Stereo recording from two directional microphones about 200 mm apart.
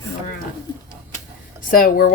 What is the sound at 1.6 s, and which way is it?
Speech, 45° left (ahead or behind).